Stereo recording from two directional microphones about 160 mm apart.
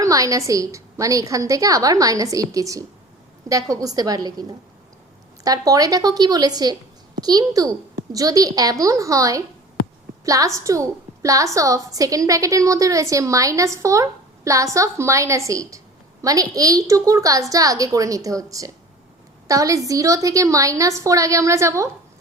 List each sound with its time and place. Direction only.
0.0 s a woman's voice: 20° right (ahead or behind)